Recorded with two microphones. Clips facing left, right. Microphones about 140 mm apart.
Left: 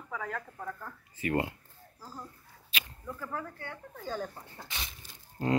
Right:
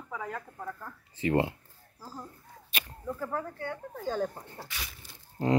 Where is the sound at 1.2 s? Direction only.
25° right (ahead or behind).